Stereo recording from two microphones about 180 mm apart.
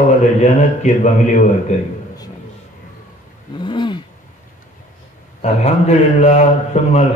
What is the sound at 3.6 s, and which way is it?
Roaring cats, 25° left (ahead or behind).